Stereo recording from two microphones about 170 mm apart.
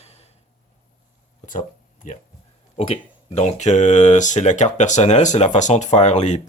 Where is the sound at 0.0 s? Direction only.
40° left (ahead or behind).